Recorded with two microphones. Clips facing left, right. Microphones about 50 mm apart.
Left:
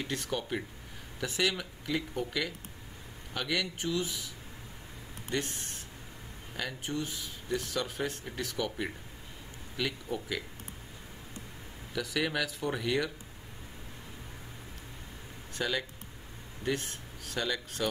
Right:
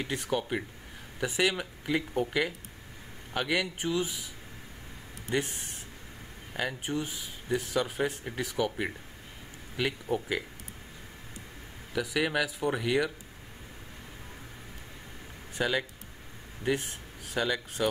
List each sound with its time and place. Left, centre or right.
0.0 s speech: centre
5.3 s speech: centre
11.9 s speech: centre
15.5 s speech: centre